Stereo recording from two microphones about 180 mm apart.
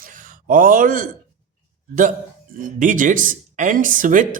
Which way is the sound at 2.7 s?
45° right (ahead or behind).